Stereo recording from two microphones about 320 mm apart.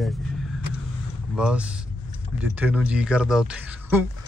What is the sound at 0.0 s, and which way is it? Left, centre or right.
Vehicle, centre.